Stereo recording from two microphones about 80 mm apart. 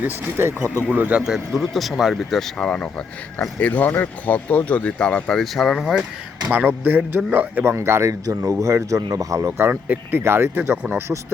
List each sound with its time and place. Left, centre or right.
0.0 s a man's voice: right
0.9 s speech: centre
1.2 s speech: centre
5.4 s speech: centre
6.7 s a man's voice: right
9.6 s speech: right